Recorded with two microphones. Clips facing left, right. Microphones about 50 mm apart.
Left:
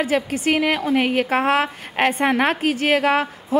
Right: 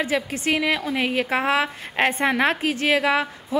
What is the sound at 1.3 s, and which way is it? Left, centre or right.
A woman's voice, centre.